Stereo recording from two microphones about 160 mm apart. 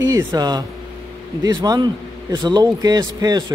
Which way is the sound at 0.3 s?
25° right (ahead or behind).